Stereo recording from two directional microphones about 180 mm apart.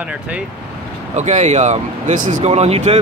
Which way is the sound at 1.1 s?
40° right (ahead or behind).